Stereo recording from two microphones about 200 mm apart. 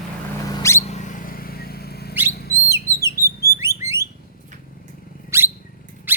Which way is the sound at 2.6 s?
15° right (ahead or behind).